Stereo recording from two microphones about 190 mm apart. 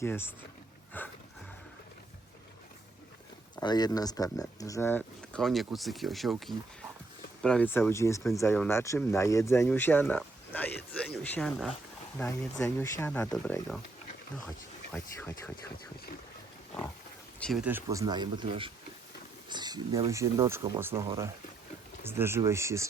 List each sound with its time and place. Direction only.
0.0 s speech: 10° left (ahead or behind)
3.6 s speech: 20° left (ahead or behind); by 6.3 s centre (ahead or behind)
7.4 s speech: 5° left (ahead or behind)
12.1 s speech: 15° left (ahead or behind)
14.9 s speech: 10° left (ahead or behind)
17.4 s speech: centre (ahead or behind)
17.7 s speech: 15° right (ahead or behind)
22.0 s speech: 10° right (ahead or behind)